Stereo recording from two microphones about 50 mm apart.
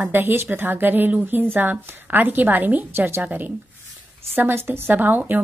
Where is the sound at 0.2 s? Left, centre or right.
Right.